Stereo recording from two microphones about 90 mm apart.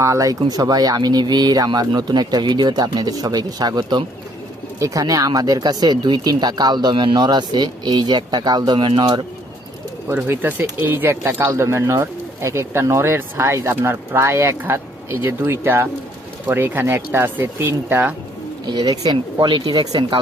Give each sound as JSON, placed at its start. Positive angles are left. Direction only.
{"t": 0.0, "sound": "speech", "side_deg": -40}
{"t": 4.8, "sound": "speech", "side_deg": -40}
{"t": 10.2, "sound": "speech", "side_deg": -20}
{"t": 18.7, "sound": "speech", "side_deg": -50}